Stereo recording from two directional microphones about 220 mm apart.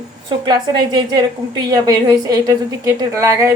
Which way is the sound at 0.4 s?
20° right (ahead or behind).